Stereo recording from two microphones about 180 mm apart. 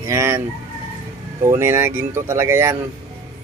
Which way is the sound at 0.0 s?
15° right (ahead or behind).